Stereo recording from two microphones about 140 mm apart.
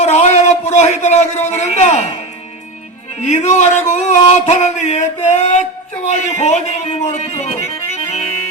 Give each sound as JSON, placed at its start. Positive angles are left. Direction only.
{"t": 0.0, "sound": "a man's voice", "side_deg": 50}
{"t": 3.2, "sound": "music", "side_deg": 55}